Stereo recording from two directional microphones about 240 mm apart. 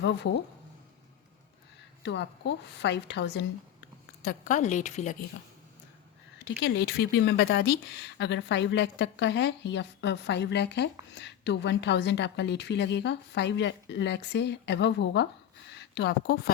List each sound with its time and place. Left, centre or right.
0.0 s speech: left
2.0 s a woman's voice: left
6.4 s speech: left